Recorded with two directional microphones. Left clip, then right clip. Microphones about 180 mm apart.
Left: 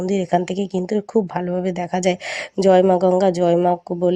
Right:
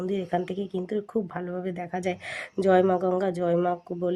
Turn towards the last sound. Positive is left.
turn(degrees=35)  # may be behind; listen again after turning